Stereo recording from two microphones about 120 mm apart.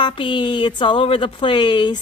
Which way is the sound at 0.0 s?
45° left (ahead or behind).